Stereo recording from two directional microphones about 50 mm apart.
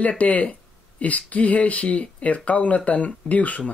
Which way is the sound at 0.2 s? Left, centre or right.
Left.